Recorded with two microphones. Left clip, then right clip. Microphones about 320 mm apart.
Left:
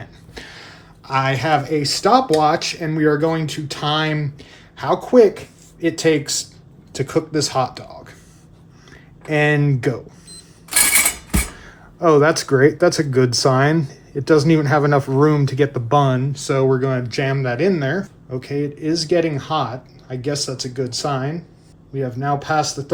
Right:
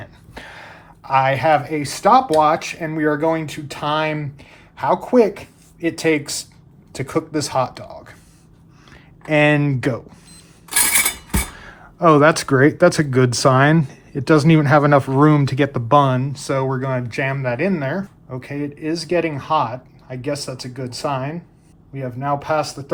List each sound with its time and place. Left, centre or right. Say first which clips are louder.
0.0 s speech: even; centre
9.2 s speech: right 2 dB; right
10.7 s cutlery: left 2 dB; centre
11.5 s speech: right 2 dB; right